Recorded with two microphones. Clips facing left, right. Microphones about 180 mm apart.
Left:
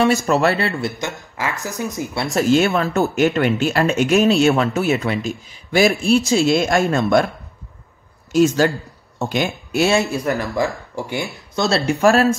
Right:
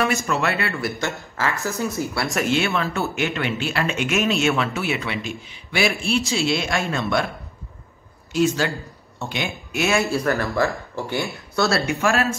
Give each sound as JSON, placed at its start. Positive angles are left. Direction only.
{"t": 0.3, "sound": "speech", "side_deg": 35}
{"t": 2.4, "sound": "speech", "side_deg": 40}
{"t": 8.3, "sound": "speech", "side_deg": 45}
{"t": 10.0, "sound": "speech", "side_deg": 20}
{"t": 11.7, "sound": "speech", "side_deg": 35}